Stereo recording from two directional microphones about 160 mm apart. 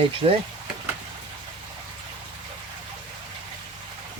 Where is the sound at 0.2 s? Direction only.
35° right (ahead or behind).